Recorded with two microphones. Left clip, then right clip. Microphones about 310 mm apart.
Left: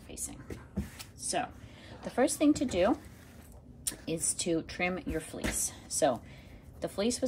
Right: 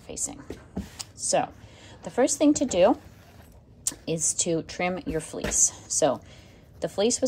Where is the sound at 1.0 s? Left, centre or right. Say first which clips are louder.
Right 10 dB; centre.